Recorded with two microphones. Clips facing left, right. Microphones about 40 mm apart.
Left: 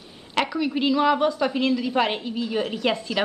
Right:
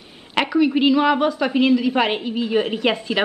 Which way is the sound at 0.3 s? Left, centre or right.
Centre.